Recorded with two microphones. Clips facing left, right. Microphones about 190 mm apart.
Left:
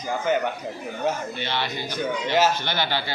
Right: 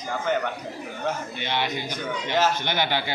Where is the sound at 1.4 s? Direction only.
15° right (ahead or behind).